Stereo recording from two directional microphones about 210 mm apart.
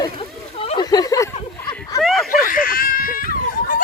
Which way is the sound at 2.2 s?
40° left (ahead or behind).